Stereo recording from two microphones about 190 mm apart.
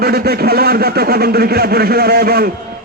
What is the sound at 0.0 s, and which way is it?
A man's voice, 55° right (ahead or behind).